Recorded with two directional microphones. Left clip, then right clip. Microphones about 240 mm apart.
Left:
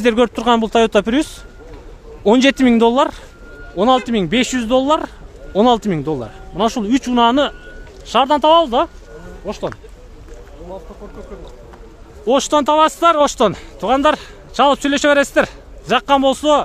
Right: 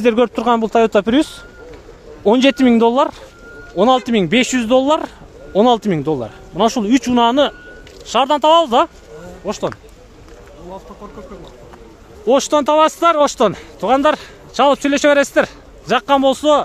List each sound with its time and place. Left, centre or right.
0.0 s speech: centre
12.3 s speech: centre